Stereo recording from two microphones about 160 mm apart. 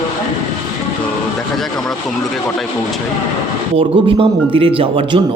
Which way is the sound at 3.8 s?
35° right (ahead or behind).